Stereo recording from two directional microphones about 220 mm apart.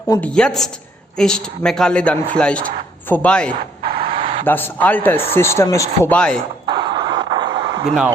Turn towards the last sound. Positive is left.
turn(degrees=-20)  # may be behind; listen again after turning